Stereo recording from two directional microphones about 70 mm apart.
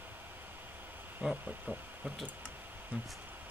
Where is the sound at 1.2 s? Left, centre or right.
Right.